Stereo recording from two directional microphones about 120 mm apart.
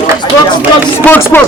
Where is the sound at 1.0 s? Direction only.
15° left (ahead or behind).